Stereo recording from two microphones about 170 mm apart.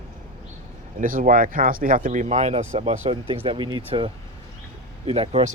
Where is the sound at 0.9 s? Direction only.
55° right (ahead or behind).